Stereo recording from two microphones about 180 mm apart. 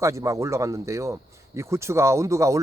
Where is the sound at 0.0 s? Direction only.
15° right (ahead or behind).